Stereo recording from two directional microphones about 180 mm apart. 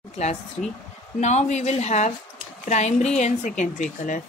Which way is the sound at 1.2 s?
40° left (ahead or behind).